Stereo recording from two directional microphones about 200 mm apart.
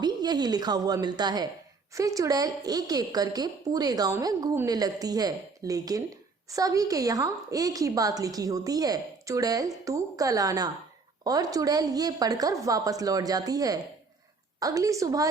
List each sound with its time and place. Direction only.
0.0 s a woman's voice: 20° right (ahead or behind)